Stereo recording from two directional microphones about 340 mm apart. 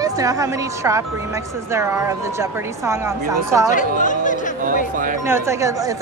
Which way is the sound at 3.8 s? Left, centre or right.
Left.